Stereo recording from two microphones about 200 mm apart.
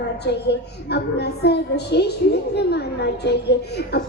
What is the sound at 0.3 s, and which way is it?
Child singing, 55° left (ahead or behind).